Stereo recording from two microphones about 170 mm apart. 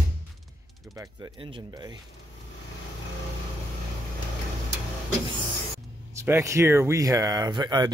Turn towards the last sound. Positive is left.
turn(degrees=-25)  # may be behind; listen again after turning